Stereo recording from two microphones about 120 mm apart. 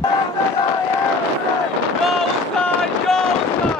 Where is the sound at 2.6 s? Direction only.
5° left (ahead or behind).